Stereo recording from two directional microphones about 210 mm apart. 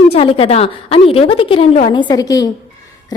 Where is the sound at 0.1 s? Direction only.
25° left (ahead or behind).